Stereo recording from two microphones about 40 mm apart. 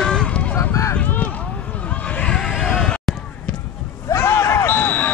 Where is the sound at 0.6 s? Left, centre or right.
Left.